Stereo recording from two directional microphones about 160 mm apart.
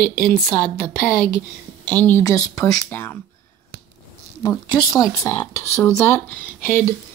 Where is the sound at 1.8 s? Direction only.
10° left (ahead or behind).